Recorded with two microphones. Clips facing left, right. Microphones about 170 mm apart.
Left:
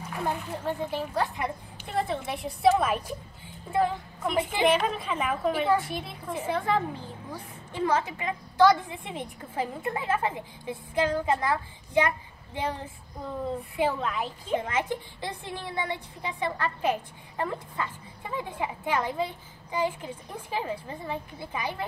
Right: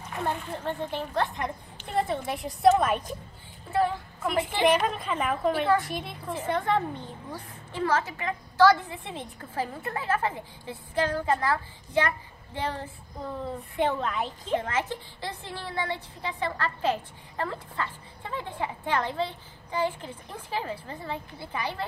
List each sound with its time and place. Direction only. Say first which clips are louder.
0.1 s a child's voice: even; 10° left (ahead or behind)
4.2 s a child's voice: even; centre (ahead or behind)
5.5 s a woman's voice: even; 10° left (ahead or behind)
5.8 s a child's voice: even; centre (ahead or behind)
7.7 s a woman's voice: even; 15° left (ahead or behind)
13.7 s a woman's voice: right 1 dB; 5° left (ahead or behind)